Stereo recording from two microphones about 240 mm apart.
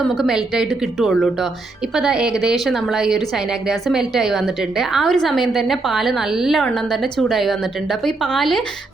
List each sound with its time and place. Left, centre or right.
0.1 s a woman's voice: centre